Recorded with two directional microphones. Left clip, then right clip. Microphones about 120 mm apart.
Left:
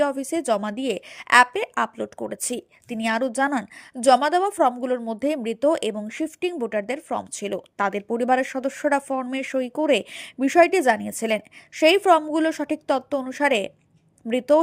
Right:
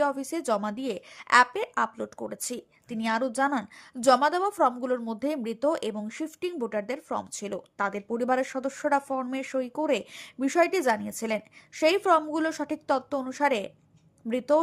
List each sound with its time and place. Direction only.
0.0 s a woman's voice: 15° left (ahead or behind)